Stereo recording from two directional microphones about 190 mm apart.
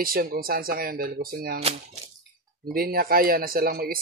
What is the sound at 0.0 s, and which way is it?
Speech, 50° right (ahead or behind).